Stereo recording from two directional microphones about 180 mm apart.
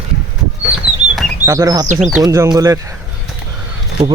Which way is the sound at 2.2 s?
20° right (ahead or behind).